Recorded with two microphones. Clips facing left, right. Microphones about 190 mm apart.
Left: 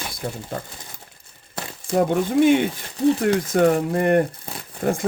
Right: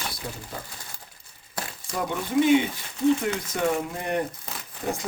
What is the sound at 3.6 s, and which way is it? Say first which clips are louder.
Speech: left 6 dB; 55° left (ahead or behind).